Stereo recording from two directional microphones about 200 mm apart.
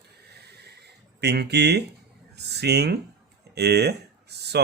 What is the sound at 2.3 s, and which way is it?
Speech, 55° right (ahead or behind).